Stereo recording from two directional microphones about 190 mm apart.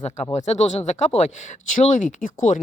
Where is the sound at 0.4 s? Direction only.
35° left (ahead or behind).